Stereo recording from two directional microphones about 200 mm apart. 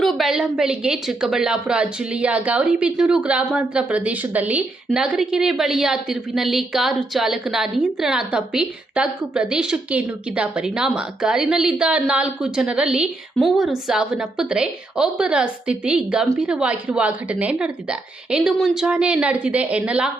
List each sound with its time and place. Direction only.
0.0 s a woman's voice: centre (ahead or behind)